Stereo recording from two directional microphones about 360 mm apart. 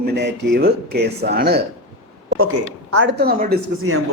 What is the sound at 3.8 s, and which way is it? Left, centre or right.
Speech, right.